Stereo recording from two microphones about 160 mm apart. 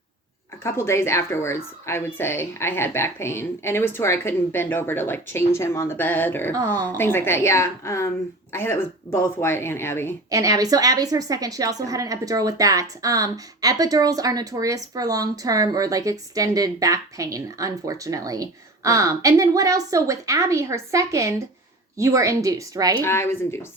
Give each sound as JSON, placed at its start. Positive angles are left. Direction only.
{"t": 0.6, "sound": "speech", "side_deg": 15}
{"t": 6.5, "sound": "a woman's voice", "side_deg": -20}
{"t": 6.8, "sound": "speech", "side_deg": 15}
{"t": 10.2, "sound": "a woman's voice", "side_deg": -20}
{"t": 23.0, "sound": "speech", "side_deg": 15}